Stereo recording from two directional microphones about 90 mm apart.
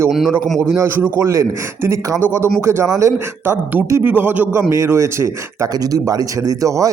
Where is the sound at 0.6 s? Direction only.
30° right (ahead or behind).